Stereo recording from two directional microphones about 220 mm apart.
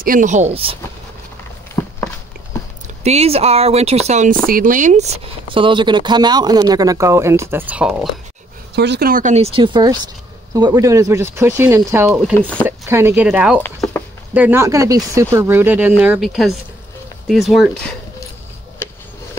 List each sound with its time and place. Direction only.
0.0 s speech: 35° right (ahead or behind)
1.8 s a sound: 10° left (ahead or behind)
3.0 s speech: 30° right (ahead or behind); by 8.1 s 5° right (ahead or behind)
8.7 s speech: 50° right (ahead or behind); by 12.4 s 10° right (ahead or behind)
12.4 s speech: 5° left (ahead or behind)
12.6 s speech: 10° right (ahead or behind)
13.6 s a sound: 10° left (ahead or behind)
14.3 s speech: 10° right (ahead or behind)